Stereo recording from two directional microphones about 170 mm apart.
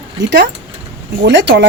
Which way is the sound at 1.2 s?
90° right.